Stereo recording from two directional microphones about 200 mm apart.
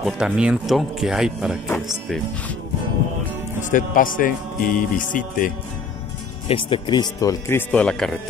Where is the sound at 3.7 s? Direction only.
45° left (ahead or behind).